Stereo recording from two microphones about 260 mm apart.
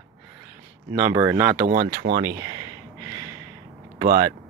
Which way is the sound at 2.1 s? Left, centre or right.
Right.